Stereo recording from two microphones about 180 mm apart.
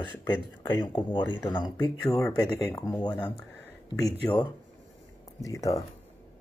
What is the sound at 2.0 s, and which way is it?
Speech, 5° left (ahead or behind).